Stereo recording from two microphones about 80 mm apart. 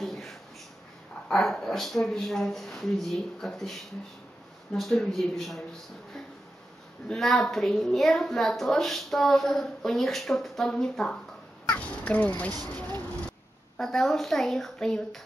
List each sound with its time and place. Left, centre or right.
0.0 s a sound: centre
1.3 s a woman's voice: centre
7.1 s a woman's voice: centre
11.6 s crow: centre
13.7 s a woman's voice: centre